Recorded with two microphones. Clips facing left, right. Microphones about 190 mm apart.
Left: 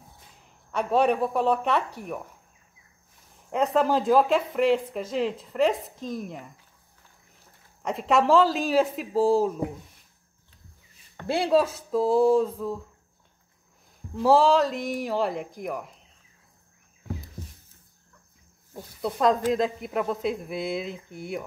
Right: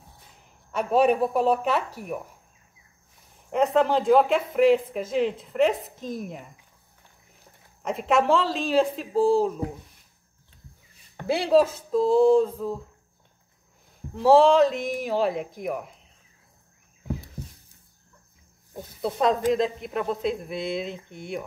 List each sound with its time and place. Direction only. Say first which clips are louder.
0.7 s speech: right 2 dB; 5° right (ahead or behind)
3.5 s speech: right 2 dB; centre (ahead or behind)
7.8 s speech: even; centre (ahead or behind)
11.2 s speech: right 2 dB; centre (ahead or behind)
14.1 s speech: right 3 dB; centre (ahead or behind)
19.5 s speech: right 1 dB; centre (ahead or behind)